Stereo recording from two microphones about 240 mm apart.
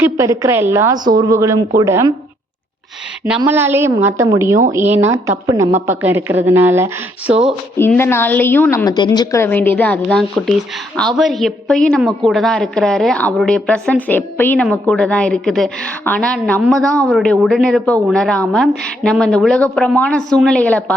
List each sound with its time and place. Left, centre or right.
0.0 s a woman's voice: centre
3.2 s a woman's voice: centre
7.8 s a woman's voice: centre
16.6 s a woman's voice: centre